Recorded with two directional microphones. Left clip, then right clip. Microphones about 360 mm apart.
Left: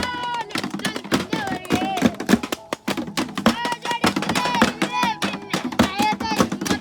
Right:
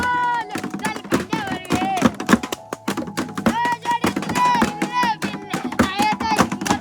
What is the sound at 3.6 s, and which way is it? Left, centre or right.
Music, centre.